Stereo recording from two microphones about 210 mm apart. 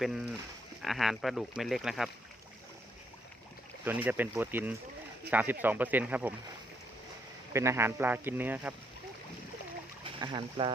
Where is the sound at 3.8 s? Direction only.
10° right (ahead or behind).